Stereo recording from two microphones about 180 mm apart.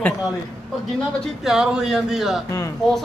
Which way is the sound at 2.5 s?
15° left (ahead or behind).